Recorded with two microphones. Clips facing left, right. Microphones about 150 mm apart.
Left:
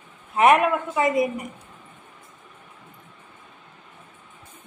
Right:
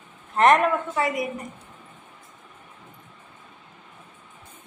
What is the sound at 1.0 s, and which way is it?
Speech, 20° left (ahead or behind).